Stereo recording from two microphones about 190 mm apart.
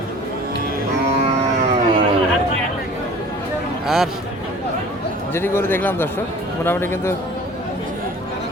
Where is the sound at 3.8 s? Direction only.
Centre (ahead or behind).